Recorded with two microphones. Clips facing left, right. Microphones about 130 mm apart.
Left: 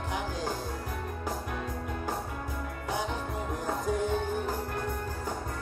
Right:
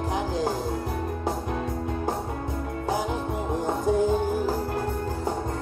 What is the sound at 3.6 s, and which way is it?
Music, 30° right (ahead or behind).